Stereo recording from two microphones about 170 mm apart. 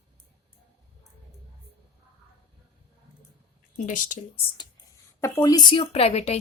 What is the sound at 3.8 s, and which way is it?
Speech, 50° left (ahead or behind).